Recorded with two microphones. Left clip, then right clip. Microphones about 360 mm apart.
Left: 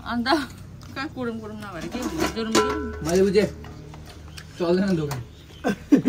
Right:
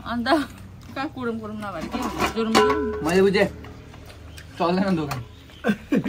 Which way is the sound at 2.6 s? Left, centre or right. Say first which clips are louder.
Right 4 dB; centre.